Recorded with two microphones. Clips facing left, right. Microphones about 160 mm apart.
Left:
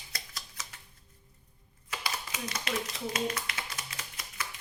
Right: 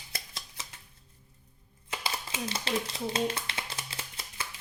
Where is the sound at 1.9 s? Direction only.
25° right (ahead or behind).